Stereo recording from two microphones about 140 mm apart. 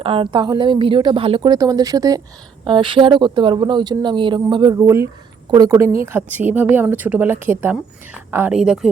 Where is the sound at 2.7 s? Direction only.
35° right (ahead or behind).